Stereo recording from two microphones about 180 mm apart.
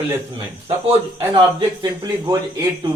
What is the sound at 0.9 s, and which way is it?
A man's voice, 30° right (ahead or behind).